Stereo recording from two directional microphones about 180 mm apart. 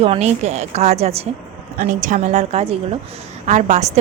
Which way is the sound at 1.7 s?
45° right (ahead or behind).